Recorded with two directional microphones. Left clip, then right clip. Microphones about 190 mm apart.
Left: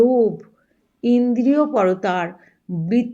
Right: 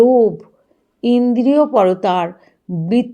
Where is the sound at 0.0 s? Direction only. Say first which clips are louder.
Right 5 dB; 30° right (ahead or behind).